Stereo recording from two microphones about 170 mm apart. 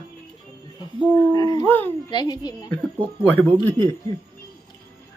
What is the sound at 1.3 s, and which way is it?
Speech, 20° left (ahead or behind).